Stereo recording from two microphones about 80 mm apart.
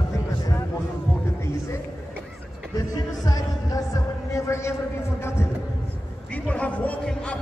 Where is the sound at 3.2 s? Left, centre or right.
Left.